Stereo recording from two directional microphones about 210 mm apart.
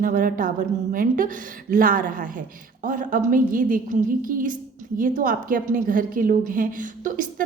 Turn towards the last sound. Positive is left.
turn(degrees=-40)  # may be behind; listen again after turning